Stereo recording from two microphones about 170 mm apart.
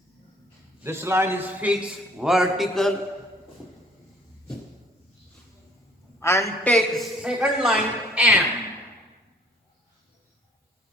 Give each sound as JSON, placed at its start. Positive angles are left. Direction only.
{"t": 0.8, "sound": "a man's voice", "side_deg": -15}
{"t": 1.7, "sound": "a woman's voice", "side_deg": 0}
{"t": 6.1, "sound": "a man's voice", "side_deg": 15}
{"t": 6.7, "sound": "a woman's voice", "side_deg": 0}